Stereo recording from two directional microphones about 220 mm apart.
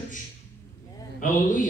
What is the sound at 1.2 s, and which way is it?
Speech, 35° left (ahead or behind).